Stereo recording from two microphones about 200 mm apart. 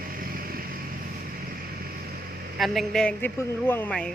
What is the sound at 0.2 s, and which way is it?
Vehicle, 45° right (ahead or behind).